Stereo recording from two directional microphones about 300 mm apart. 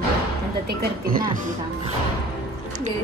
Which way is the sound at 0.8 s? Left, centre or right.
Right.